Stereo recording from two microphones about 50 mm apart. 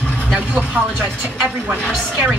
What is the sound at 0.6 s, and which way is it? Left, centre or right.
Speech, centre.